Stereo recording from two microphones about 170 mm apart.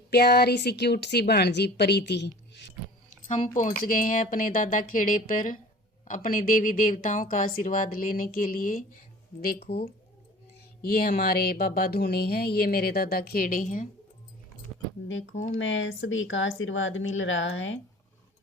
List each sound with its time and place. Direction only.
0.1 s speech: 70° left (ahead or behind); by 2.7 s 85° left
3.6 s speech: 50° left (ahead or behind)
10.8 s speech: 65° left (ahead or behind)
15.0 s speech: 90° left